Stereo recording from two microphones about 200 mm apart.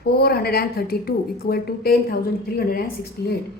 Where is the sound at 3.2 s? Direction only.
55° left (ahead or behind).